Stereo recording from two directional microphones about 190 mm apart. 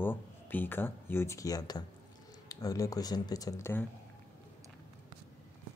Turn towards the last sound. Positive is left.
turn(degrees=15)  # may be behind; listen again after turning